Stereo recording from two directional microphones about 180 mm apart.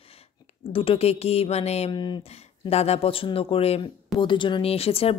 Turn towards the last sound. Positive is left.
turn(degrees=35)  # may be behind; listen again after turning